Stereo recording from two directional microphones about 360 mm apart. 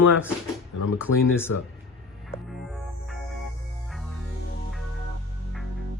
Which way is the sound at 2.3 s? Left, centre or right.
Centre.